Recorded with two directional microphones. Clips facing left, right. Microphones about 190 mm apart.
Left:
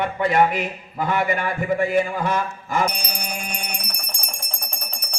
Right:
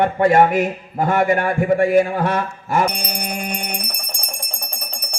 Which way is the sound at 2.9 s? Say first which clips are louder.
Right 5 dB; 60° right (ahead or behind).